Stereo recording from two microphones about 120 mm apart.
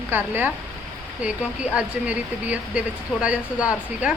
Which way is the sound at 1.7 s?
10° right (ahead or behind).